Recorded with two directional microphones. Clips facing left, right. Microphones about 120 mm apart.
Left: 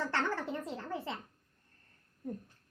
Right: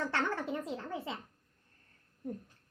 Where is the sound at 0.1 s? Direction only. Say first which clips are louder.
Even; 15° right (ahead or behind).